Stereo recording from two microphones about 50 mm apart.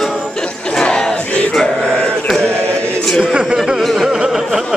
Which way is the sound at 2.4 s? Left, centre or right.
Right.